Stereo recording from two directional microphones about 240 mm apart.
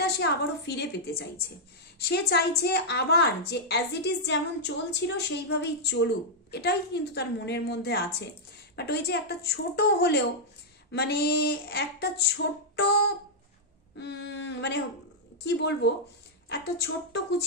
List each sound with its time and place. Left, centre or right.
0.0 s a woman's voice: left
14.0 s a sound: left
15.4 s a woman's voice: left